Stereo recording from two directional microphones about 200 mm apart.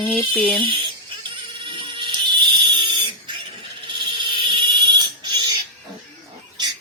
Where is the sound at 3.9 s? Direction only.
25° right (ahead or behind).